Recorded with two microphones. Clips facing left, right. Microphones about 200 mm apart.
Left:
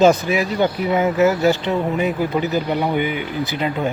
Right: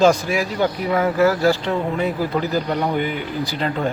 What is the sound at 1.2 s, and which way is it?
Speech, 20° left (ahead or behind).